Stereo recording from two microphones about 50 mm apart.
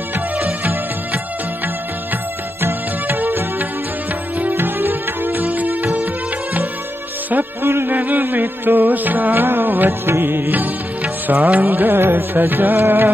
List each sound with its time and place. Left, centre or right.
0.4 s music: right
2.6 s music: right
7.6 s a sound: right
7.9 s music: right